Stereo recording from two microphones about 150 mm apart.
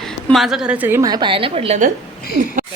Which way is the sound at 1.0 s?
30° right (ahead or behind).